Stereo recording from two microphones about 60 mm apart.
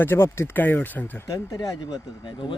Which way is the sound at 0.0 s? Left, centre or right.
Left.